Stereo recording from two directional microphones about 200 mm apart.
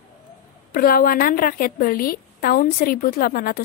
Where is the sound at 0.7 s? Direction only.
45° left (ahead or behind).